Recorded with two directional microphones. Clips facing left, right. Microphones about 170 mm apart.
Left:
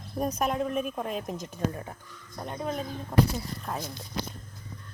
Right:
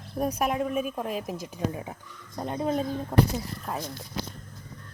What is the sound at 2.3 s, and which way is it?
Speech, 25° right (ahead or behind).